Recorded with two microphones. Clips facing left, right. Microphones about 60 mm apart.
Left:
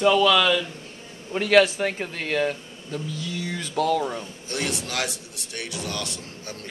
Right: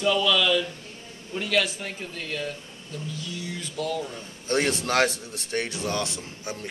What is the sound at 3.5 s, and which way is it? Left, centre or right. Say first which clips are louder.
Speech: left 7 dB; left.